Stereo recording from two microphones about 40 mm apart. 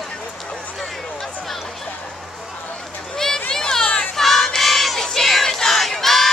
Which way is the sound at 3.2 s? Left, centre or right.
Centre.